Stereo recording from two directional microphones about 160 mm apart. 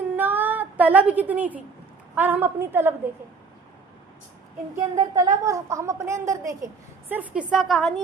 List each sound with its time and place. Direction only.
0.2 s music: 10° right (ahead or behind)
2.1 s a woman's voice: 10° right (ahead or behind)
4.9 s a woman's voice: 25° right (ahead or behind)
7.1 s a woman's voice: 10° right (ahead or behind)